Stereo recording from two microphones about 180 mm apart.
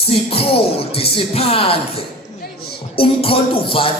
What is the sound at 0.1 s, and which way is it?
Speech, 30° left (ahead or behind).